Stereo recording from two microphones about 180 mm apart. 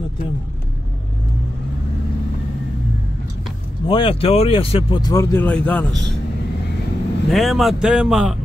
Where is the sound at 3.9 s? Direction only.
30° left (ahead or behind).